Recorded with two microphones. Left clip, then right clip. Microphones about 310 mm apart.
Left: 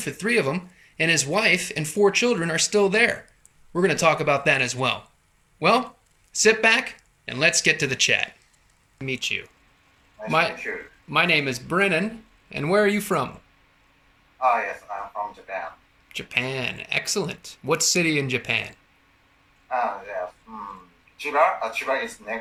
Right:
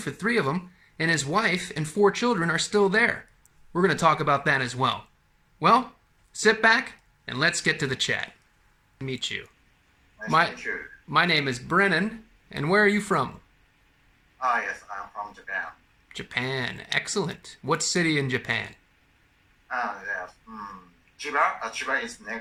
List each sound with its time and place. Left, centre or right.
0.0 s speech: centre
11.1 s speech: centre
14.5 s a sound: centre
16.1 s speech: centre
21.3 s speech: centre